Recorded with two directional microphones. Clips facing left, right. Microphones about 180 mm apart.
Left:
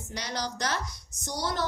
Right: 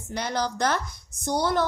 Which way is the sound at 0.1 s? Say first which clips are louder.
Right 6 dB; 55° right (ahead or behind).